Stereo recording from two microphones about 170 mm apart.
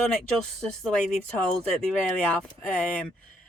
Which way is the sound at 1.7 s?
5° left (ahead or behind).